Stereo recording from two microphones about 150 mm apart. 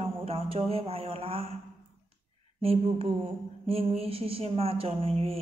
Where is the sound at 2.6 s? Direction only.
40° right (ahead or behind).